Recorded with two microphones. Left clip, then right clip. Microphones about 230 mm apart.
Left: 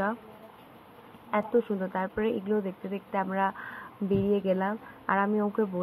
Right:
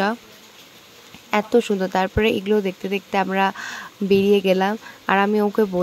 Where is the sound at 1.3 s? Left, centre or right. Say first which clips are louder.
Right 8 dB; right.